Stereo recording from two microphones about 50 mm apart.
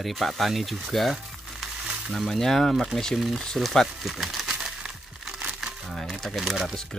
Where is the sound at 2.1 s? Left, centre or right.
Centre.